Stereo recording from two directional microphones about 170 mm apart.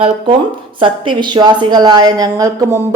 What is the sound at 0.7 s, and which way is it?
A woman's voice, 30° right (ahead or behind).